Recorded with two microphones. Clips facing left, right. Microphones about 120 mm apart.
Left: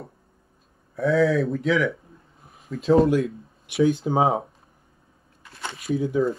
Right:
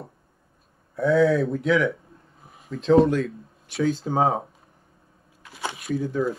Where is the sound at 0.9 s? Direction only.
Centre (ahead or behind).